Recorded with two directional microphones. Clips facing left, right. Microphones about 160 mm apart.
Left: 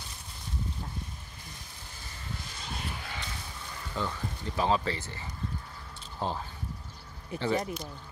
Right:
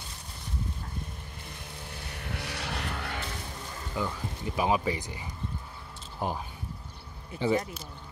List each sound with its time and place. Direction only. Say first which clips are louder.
1.9 s vehicle: right 3 dB; 65° right (ahead or behind)
3.9 s speech: right 1 dB; 10° right (ahead or behind)